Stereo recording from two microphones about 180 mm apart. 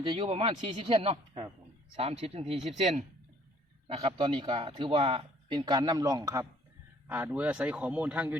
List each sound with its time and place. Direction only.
0.0 s a man's voice: 30° right (ahead or behind); by 8.4 s 5° right (ahead or behind)